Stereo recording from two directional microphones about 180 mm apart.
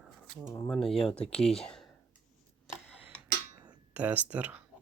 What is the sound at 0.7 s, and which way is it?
Speech, centre (ahead or behind).